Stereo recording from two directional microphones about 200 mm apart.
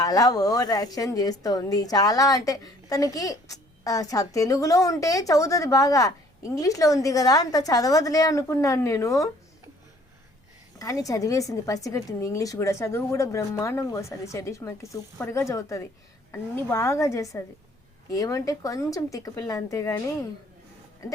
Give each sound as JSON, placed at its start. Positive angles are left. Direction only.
{"t": 0.0, "sound": "a woman's voice", "side_deg": 15}
{"t": 10.8, "sound": "a woman's voice", "side_deg": 15}